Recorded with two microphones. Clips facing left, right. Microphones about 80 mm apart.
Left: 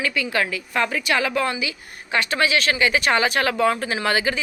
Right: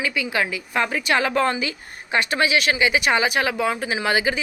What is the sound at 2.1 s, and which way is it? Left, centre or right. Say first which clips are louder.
A woman's voice: right 1 dB; right.